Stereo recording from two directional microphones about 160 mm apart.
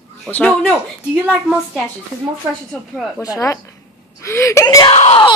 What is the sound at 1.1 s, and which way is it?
Speech, 10° right (ahead or behind).